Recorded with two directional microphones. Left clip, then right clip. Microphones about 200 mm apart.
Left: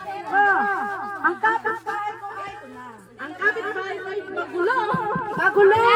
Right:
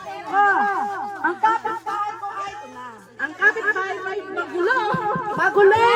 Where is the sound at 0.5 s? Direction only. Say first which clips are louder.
Right 1 dB; 30° right (ahead or behind).